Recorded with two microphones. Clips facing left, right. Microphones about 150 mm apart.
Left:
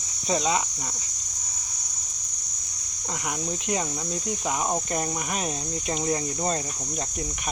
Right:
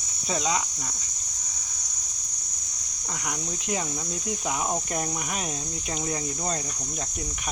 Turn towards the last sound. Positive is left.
turn(degrees=0)  # may be behind; listen again after turning